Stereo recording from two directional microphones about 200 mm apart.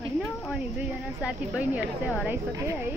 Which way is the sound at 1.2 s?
5° right (ahead or behind).